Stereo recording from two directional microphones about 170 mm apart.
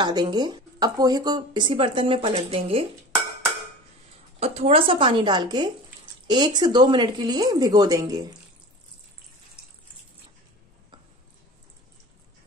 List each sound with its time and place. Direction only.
0.0 s speech: 25° right (ahead or behind)
4.4 s a woman's voice: 40° right (ahead or behind); by 8.4 s 20° right (ahead or behind)